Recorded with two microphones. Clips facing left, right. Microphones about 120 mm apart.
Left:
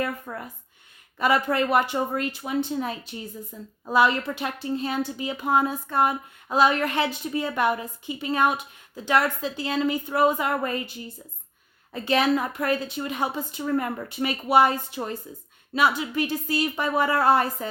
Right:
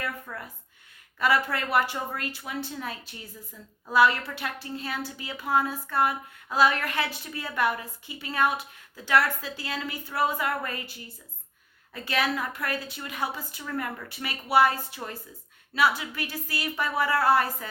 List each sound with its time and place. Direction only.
0.0 s a woman's voice: 20° left (ahead or behind)